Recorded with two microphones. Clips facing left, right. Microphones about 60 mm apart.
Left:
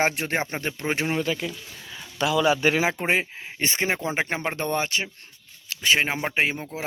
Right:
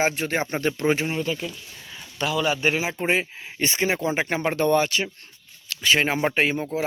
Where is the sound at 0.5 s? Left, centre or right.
Centre.